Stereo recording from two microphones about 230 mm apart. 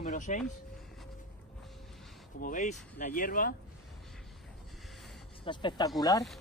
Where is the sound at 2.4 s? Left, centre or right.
Left.